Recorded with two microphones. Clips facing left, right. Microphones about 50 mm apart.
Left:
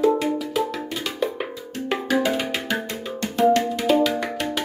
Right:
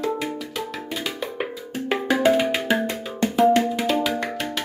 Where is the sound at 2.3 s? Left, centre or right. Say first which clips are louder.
Right 5 dB; centre.